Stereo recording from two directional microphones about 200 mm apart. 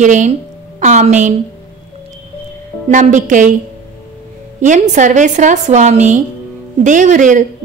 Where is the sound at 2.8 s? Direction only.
40° right (ahead or behind).